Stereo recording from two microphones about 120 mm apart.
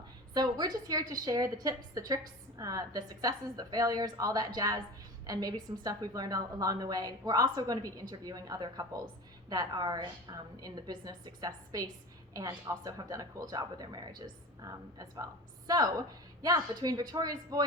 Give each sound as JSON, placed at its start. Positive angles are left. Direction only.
{"t": 0.3, "sound": "a woman's voice", "side_deg": -35}